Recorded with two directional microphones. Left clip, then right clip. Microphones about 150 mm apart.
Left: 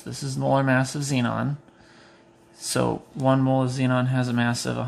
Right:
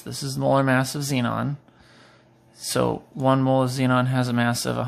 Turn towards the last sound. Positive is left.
turn(degrees=-35)  # may be behind; listen again after turning